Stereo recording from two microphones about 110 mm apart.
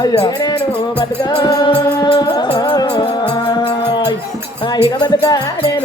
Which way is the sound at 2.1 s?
40° left (ahead or behind).